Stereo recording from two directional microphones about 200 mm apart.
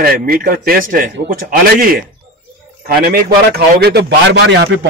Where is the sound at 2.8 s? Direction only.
45° right (ahead or behind).